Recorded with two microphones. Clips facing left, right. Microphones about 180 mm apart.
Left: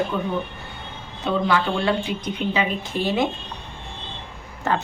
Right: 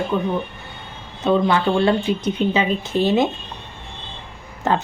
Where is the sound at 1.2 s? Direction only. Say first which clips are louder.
Right 4 dB; 25° right (ahead or behind).